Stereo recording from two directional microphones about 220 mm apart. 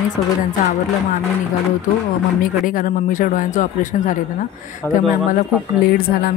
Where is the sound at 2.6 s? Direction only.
40° left (ahead or behind).